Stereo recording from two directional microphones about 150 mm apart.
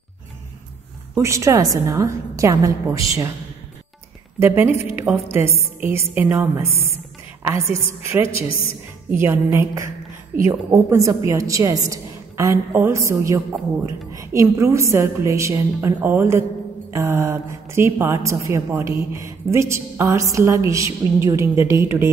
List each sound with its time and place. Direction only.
1.1 s a woman's voice: 20° right (ahead or behind)
4.4 s a woman's voice: 15° right (ahead or behind)
10.3 s a woman's voice: 80° right
10.7 s a woman's voice: 20° right (ahead or behind)